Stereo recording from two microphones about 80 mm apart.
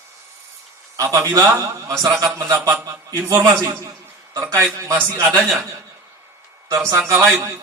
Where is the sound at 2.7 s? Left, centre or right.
Right.